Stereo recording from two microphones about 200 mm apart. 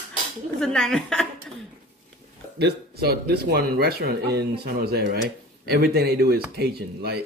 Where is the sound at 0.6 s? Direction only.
Centre (ahead or behind).